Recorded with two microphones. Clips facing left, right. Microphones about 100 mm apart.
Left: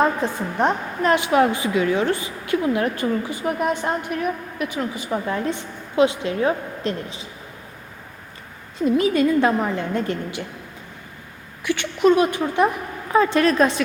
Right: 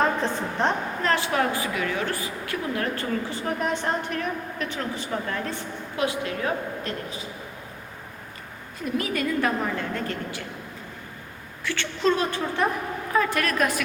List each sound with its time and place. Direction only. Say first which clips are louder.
0.0 s a woman's voice: left 3 dB; 10° left (ahead or behind)
8.8 s a woman's voice: left 9 dB; 25° left (ahead or behind)
11.6 s a woman's voice: left 6 dB; 15° left (ahead or behind)
13.1 s a woman's voice: left 7 dB; 25° left (ahead or behind)